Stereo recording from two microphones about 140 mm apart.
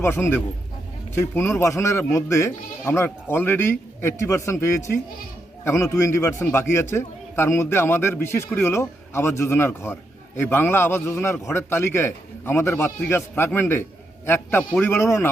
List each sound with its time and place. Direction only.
0.0 s a man's voice: 15° left (ahead or behind)